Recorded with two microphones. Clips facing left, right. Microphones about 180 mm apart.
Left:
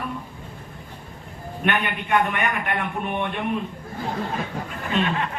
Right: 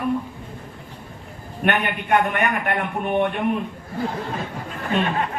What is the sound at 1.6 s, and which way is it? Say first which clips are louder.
A man's voice: right 2 dB; 45° right (ahead or behind).